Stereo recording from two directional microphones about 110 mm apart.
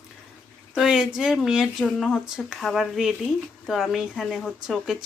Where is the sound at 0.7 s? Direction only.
5° right (ahead or behind).